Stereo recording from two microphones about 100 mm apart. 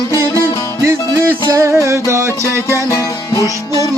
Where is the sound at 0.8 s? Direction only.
25° right (ahead or behind).